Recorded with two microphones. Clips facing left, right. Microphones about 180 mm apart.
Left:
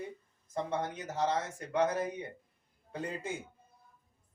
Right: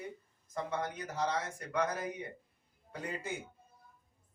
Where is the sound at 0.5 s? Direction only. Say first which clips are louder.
Left 2 dB; 20° left (ahead or behind).